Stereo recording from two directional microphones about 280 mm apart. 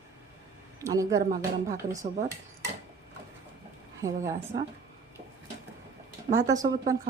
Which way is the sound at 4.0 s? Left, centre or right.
Centre.